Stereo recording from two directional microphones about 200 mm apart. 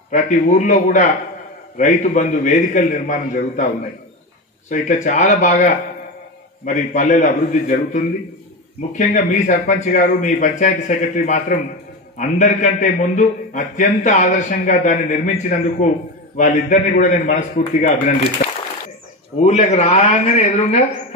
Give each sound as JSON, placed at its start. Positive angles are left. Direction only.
{"t": 0.1, "sound": "a man's voice", "side_deg": 40}
{"t": 4.6, "sound": "a man's voice", "side_deg": 40}
{"t": 19.4, "sound": "a man's voice", "side_deg": 30}